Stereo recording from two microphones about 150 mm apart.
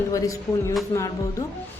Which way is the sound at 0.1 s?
20° left (ahead or behind).